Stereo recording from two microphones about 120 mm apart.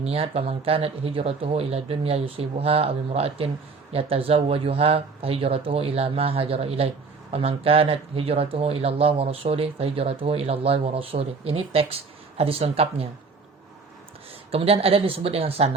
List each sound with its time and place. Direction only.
0.0 s speech: 55° right (ahead or behind)
14.5 s speech: 55° right (ahead or behind)